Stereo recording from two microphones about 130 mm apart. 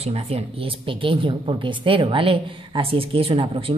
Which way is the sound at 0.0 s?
50° right (ahead or behind).